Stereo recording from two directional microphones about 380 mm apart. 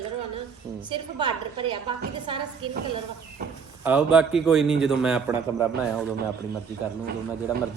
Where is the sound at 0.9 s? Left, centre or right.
Centre.